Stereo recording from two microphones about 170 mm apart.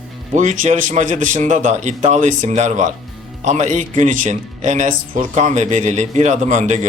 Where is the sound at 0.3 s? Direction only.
45° right (ahead or behind).